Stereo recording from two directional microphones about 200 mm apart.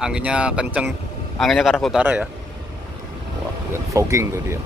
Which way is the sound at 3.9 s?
15° right (ahead or behind).